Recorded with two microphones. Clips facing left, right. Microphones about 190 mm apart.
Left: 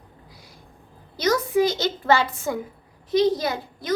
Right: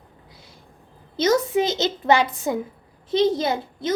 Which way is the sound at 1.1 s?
25° right (ahead or behind).